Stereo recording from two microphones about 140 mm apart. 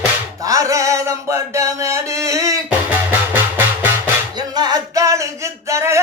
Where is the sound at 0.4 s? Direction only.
25° right (ahead or behind).